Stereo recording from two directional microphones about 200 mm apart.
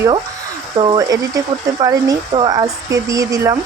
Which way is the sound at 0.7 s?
25° right (ahead or behind).